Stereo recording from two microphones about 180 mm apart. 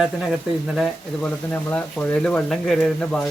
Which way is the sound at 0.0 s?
5° right (ahead or behind).